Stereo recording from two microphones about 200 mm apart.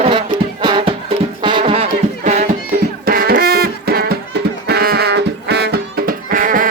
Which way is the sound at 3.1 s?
45° right (ahead or behind).